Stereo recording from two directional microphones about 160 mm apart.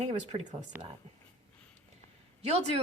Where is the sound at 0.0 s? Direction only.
40° right (ahead or behind).